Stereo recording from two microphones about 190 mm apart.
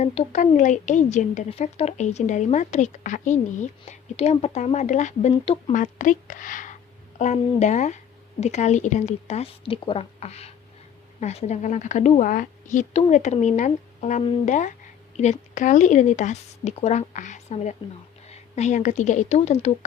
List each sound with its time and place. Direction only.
0.0 s a woman's voice: 35° left (ahead or behind)